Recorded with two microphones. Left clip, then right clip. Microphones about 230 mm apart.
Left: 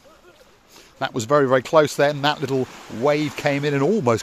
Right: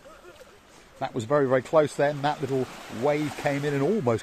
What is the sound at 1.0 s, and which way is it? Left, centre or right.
Speech, left.